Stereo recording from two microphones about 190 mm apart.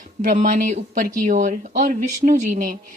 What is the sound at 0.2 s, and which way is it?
A woman's voice, 40° right (ahead or behind).